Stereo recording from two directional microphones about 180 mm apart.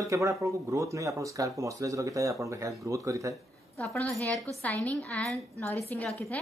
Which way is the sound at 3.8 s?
10° left (ahead or behind).